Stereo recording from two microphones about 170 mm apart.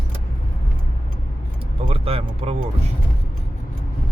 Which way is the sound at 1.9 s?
35° right (ahead or behind).